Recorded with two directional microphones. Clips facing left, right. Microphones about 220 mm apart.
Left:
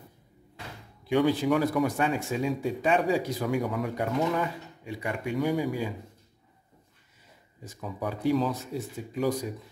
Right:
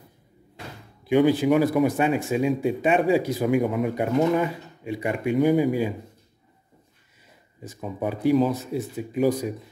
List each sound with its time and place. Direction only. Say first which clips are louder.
1.0 s speech: right 5 dB; 10° right (ahead or behind)
7.6 s speech: right 5 dB; 20° right (ahead or behind)